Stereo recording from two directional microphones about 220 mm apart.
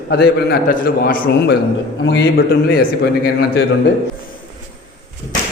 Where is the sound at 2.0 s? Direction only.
55° left (ahead or behind).